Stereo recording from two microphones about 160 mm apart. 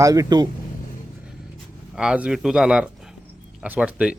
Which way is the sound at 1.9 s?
5° right (ahead or behind).